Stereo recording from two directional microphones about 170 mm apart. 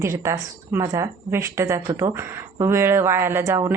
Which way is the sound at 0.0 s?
15° right (ahead or behind).